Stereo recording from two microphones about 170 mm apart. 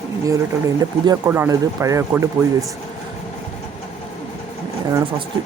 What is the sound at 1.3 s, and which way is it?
Speech, 15° right (ahead or behind).